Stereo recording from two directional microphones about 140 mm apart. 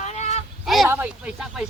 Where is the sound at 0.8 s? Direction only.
15° right (ahead or behind).